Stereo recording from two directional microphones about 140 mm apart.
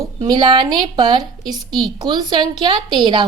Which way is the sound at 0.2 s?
30° right (ahead or behind).